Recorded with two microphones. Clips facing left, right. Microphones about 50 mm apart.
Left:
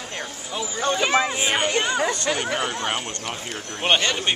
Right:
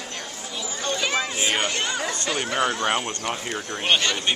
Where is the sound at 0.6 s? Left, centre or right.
Centre.